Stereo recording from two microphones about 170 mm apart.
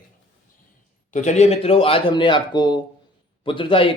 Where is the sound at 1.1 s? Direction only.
45° left (ahead or behind).